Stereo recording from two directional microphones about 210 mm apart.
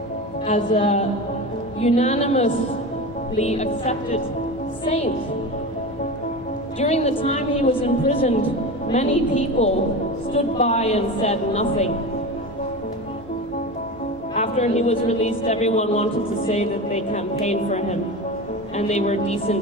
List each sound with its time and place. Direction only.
0.5 s a woman's voice: 30° left (ahead or behind)
6.8 s a woman's voice: 30° left (ahead or behind)
14.3 s a woman's voice: 30° left (ahead or behind)